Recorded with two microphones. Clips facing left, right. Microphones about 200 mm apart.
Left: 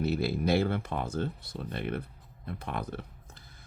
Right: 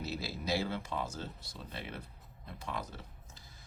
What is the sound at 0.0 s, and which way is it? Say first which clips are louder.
Speech: left 10 dB; 60° left (ahead or behind).